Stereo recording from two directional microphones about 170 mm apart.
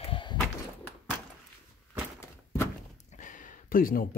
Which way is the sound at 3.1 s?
50° left (ahead or behind).